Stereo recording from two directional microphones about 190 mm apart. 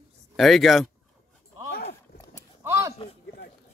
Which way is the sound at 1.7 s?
55° left (ahead or behind).